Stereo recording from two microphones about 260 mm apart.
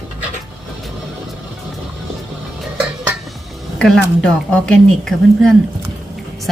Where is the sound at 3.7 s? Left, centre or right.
Centre.